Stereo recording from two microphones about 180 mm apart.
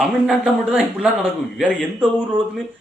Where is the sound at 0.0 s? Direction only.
Centre (ahead or behind).